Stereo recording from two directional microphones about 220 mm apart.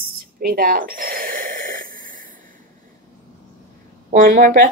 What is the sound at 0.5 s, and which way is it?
Snort, 40° right (ahead or behind).